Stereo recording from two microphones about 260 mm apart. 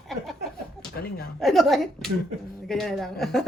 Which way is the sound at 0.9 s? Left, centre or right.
Left.